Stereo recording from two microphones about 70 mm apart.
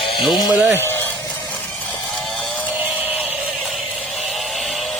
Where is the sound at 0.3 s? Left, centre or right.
Left.